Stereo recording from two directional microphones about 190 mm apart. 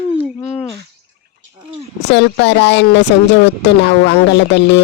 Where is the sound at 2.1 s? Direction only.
65° left (ahead or behind).